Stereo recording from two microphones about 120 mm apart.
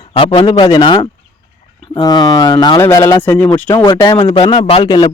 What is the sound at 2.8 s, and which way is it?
Speech, 25° left (ahead or behind).